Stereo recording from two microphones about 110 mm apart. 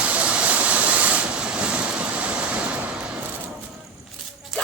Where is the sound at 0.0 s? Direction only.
10° right (ahead or behind).